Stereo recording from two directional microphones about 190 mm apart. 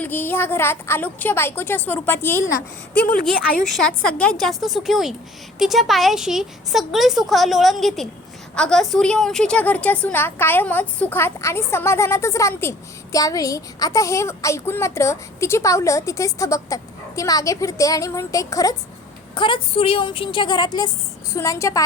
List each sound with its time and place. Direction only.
0.0 s a woman's voice: 10° left (ahead or behind)
2.5 s a woman's voice: 55° left (ahead or behind)
3.6 s a woman's voice: 5° left (ahead or behind)